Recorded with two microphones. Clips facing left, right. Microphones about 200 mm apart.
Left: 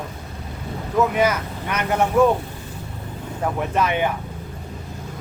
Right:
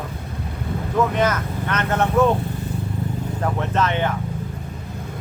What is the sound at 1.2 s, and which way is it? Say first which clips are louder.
Speech: left 1 dB; 10° left (ahead or behind).